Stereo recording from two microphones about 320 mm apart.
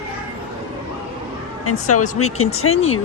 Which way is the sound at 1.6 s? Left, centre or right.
Left.